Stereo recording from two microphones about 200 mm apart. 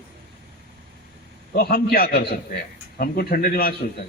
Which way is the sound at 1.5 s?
50° left (ahead or behind).